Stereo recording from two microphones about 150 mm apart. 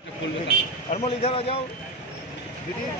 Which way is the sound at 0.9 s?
40° left (ahead or behind).